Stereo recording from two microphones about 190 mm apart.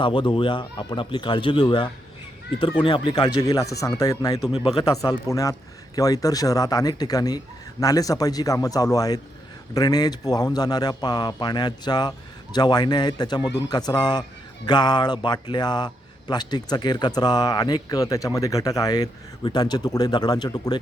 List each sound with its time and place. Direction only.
0.0 s speech: 25° left (ahead or behind)